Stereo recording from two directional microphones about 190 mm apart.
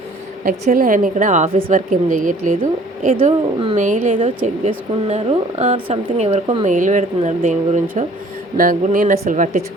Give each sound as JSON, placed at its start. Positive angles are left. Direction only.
{"t": 0.4, "sound": "a woman's voice", "side_deg": -45}
{"t": 3.2, "sound": "a woman's voice", "side_deg": -30}
{"t": 3.8, "sound": "a woman's voice", "side_deg": -40}
{"t": 6.7, "sound": "a woman's voice", "side_deg": -40}